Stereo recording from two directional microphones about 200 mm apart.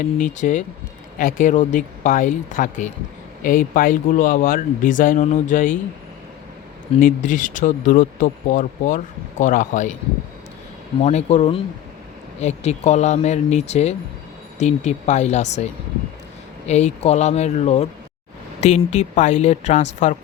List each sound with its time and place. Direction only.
0.0 s speech: 40° left (ahead or behind)
7.0 s speech: 40° left (ahead or behind)
11.0 s speech: 35° left (ahead or behind)
16.6 s speech: 35° left (ahead or behind)